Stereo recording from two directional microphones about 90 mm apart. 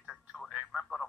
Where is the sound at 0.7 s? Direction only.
Centre (ahead or behind).